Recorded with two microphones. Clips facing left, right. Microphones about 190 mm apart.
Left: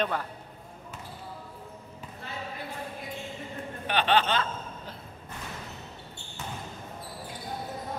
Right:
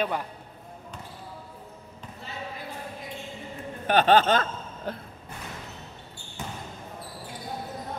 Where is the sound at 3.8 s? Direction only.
45° right (ahead or behind).